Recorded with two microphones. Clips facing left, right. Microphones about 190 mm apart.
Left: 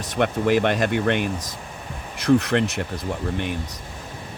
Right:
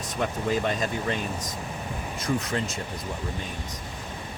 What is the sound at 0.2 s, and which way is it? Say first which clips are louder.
Speech: left 7 dB; 70° left (ahead or behind).